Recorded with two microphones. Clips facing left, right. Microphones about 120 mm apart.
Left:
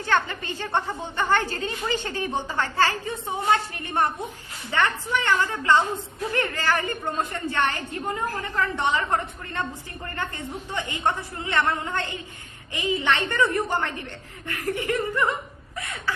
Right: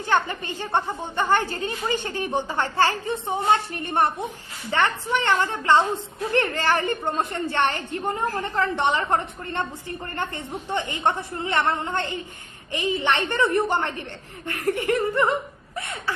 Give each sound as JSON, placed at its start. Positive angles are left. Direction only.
{"t": 0.0, "sound": "a woman's voice", "side_deg": -15}
{"t": 10.8, "sound": "a woman's voice", "side_deg": -25}
{"t": 15.7, "sound": "a sound", "side_deg": -25}